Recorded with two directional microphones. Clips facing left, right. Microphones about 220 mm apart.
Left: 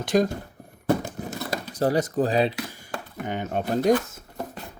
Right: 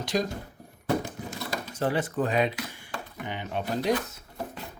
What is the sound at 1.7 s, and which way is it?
Speech, 40° left (ahead or behind).